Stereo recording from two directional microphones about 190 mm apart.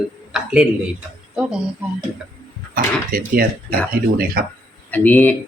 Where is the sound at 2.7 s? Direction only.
50° right (ahead or behind).